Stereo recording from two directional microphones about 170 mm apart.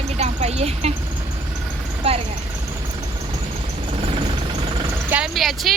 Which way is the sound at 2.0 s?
35° right (ahead or behind).